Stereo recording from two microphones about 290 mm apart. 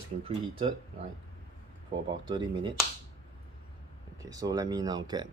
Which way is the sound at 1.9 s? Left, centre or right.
Centre.